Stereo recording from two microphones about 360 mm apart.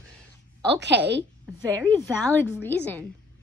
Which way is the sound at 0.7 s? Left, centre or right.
Right.